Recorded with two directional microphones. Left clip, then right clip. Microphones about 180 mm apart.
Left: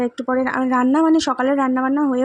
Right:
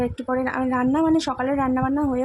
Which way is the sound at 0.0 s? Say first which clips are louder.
Left 4 dB; 15° left (ahead or behind).